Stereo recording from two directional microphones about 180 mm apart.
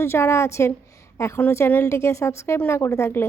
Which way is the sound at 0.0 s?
15° left (ahead or behind).